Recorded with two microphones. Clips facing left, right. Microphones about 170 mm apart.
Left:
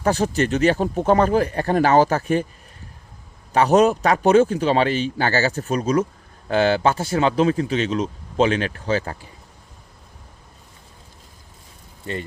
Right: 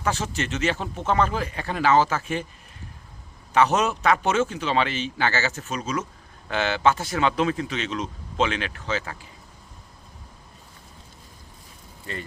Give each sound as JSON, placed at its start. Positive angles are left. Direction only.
{"t": 0.0, "sound": "speech", "side_deg": 40}
{"t": 3.5, "sound": "speech", "side_deg": 35}